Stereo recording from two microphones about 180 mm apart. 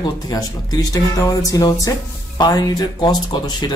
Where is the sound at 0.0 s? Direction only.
20° left (ahead or behind).